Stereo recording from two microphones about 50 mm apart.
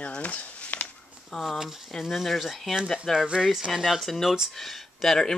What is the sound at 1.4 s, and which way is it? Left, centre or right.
Speech, centre.